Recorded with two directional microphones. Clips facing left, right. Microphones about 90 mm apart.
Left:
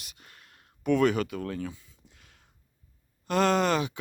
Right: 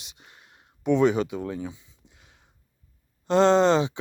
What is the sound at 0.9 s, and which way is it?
Speech, 20° right (ahead or behind).